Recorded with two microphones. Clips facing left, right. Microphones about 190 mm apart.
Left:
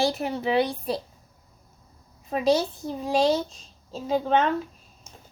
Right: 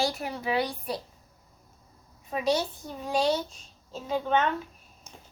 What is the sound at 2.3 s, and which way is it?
A child's voice, 30° left (ahead or behind).